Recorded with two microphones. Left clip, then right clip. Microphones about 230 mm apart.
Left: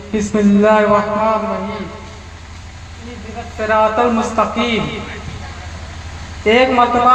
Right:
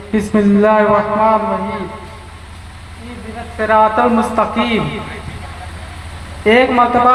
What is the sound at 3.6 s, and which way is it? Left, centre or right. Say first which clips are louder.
A man's voice: right 2 dB; right.